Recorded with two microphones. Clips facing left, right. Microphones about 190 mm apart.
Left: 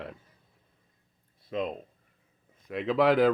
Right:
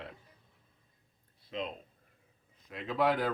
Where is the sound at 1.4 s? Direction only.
50° left (ahead or behind).